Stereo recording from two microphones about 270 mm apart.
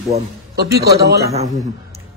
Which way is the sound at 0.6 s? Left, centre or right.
Right.